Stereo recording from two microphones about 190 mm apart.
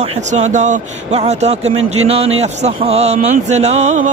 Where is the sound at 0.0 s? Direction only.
40° right (ahead or behind).